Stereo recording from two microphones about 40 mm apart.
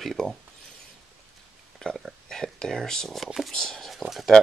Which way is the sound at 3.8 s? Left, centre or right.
Centre.